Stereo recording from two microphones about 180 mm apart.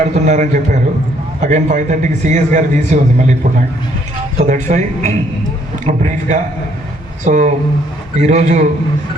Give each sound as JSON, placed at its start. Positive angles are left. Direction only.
{"t": 0.0, "sound": "a man's voice", "side_deg": -40}
{"t": 4.4, "sound": "a man's voice", "side_deg": -40}